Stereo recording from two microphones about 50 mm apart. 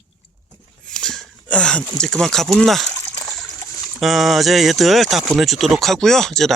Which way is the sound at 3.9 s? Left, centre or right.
Centre.